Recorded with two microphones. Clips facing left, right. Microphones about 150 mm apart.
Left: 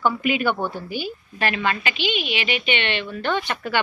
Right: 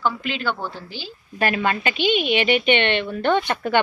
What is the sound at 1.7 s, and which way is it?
A woman's voice, 50° right (ahead or behind).